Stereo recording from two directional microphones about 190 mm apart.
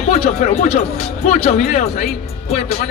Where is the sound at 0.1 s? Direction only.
35° left (ahead or behind).